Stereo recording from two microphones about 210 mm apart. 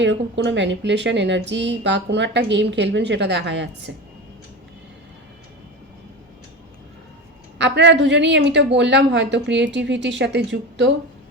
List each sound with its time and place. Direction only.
0.0 s a woman's voice: 55° right (ahead or behind)
7.6 s a woman's voice: 55° right (ahead or behind)